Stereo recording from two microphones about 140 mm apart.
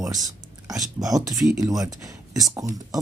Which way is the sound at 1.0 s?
25° right (ahead or behind).